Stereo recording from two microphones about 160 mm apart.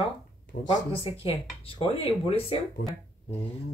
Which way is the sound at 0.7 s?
35° left (ahead or behind).